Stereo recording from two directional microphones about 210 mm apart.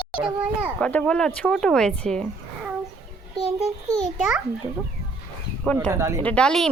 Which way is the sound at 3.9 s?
Centre (ahead or behind).